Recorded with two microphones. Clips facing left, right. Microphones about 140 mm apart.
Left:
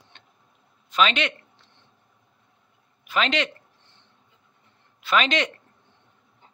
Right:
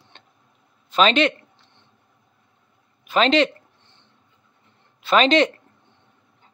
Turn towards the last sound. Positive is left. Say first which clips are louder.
# right 7 dB
turn(degrees=-30)  # may be behind; listen again after turning